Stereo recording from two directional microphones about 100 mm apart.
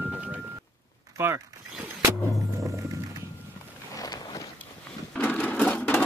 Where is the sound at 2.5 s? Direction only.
35° right (ahead or behind).